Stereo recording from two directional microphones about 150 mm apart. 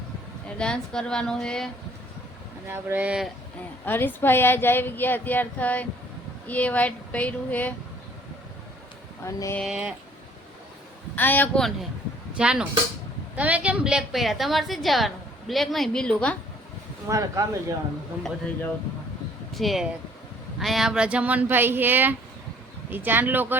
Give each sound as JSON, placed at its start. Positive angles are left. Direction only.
{"t": 0.4, "sound": "a woman's voice", "side_deg": 5}
{"t": 2.6, "sound": "speech", "side_deg": -15}
{"t": 3.8, "sound": "a woman's voice", "side_deg": 15}
{"t": 9.2, "sound": "speech", "side_deg": 20}
{"t": 9.6, "sound": "a woman's voice", "side_deg": -5}
{"t": 11.1, "sound": "a woman's voice", "side_deg": 15}
{"t": 12.4, "sound": "a woman's voice", "side_deg": -5}
{"t": 17.1, "sound": "speech", "side_deg": -20}
{"t": 19.5, "sound": "a woman's voice", "side_deg": 0}